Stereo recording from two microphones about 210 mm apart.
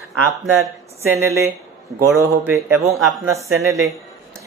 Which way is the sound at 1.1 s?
10° right (ahead or behind).